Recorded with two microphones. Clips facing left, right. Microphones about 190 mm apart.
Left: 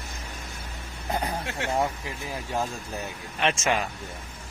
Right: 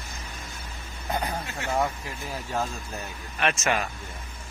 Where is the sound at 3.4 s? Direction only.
20° left (ahead or behind).